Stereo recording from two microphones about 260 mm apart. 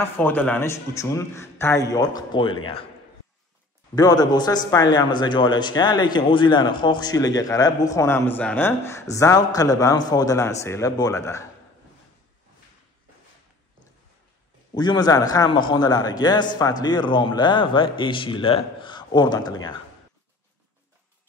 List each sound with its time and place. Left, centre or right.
0.0 s speech: centre
3.9 s speech: centre
14.7 s speech: centre